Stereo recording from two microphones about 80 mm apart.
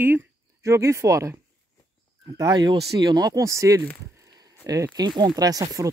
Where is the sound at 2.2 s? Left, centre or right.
Right.